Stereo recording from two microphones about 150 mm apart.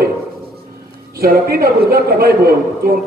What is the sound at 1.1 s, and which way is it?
A man's voice, 80° right.